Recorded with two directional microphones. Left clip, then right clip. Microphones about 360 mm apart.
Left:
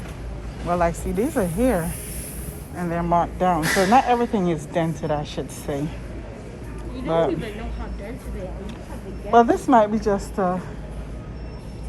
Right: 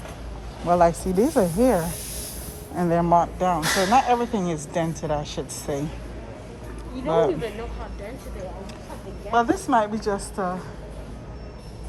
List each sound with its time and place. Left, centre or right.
0.7 s speech: centre
7.1 s speech: centre
9.3 s a woman's voice: centre